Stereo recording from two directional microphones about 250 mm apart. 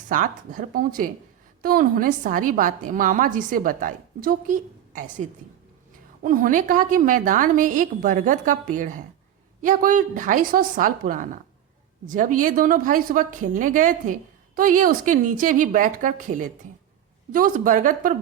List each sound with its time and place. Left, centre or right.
0.1 s a woman's voice: right
6.2 s a woman's voice: right